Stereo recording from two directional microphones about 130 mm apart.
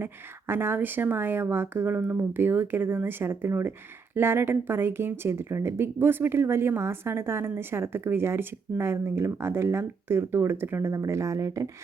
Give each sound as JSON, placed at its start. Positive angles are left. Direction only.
{"t": 0.0, "sound": "a woman's voice", "side_deg": -15}